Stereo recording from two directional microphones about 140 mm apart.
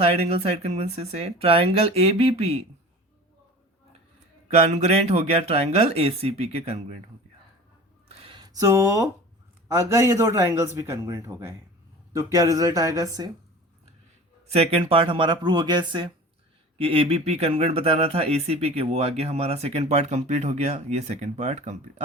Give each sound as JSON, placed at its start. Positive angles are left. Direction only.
{"t": 0.0, "sound": "speech", "side_deg": -45}
{"t": 4.4, "sound": "speech", "side_deg": -55}
{"t": 8.0, "sound": "a sound", "side_deg": -45}
{"t": 9.6, "sound": "a man's voice", "side_deg": -20}
{"t": 14.4, "sound": "speech", "side_deg": -45}
{"t": 16.7, "sound": "speech", "side_deg": -40}